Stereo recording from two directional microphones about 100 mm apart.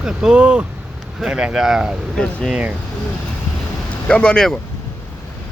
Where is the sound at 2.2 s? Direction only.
5° left (ahead or behind).